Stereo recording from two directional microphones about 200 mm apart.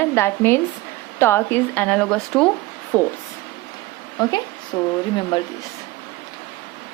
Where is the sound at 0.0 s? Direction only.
10° left (ahead or behind).